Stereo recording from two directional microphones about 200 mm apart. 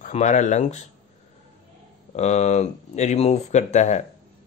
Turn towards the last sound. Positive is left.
turn(degrees=35)  # may be behind; listen again after turning